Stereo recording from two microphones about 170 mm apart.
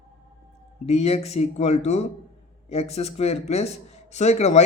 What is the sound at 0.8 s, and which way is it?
A man's voice, 40° left (ahead or behind).